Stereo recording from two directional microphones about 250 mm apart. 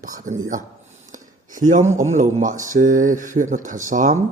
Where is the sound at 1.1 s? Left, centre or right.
Right.